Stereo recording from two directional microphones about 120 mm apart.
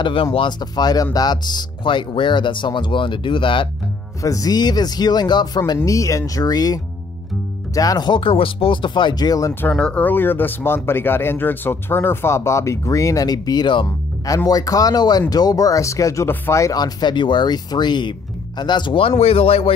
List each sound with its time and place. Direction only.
0.0 s a man's voice: 50° left (ahead or behind)
4.2 s a man's voice: 30° left (ahead or behind)
9.5 s speech: 10° left (ahead or behind); by 13.8 s 40° left (ahead or behind)
14.2 s a man's voice: 30° left (ahead or behind); by 19.7 s 50° left (ahead or behind)